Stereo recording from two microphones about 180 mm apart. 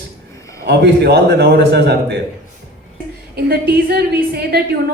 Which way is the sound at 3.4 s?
60° right (ahead or behind).